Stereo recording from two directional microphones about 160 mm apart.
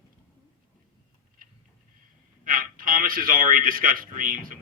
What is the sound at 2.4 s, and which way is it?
A man's voice, 60° right (ahead or behind).